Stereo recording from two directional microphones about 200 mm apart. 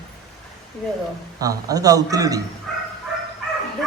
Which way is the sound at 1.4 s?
15° right (ahead or behind).